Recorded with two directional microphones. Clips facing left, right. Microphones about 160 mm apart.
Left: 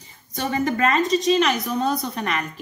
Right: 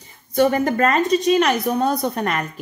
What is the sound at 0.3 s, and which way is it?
A woman's voice, 55° right (ahead or behind).